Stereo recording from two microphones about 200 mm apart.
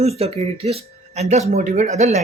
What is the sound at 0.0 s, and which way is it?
Speech, 30° right (ahead or behind).